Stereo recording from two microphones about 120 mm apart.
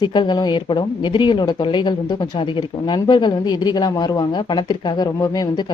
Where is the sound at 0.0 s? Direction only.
40° left (ahead or behind).